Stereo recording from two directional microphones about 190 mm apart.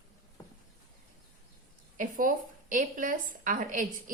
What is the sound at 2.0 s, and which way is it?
A woman's voice, 45° right (ahead or behind).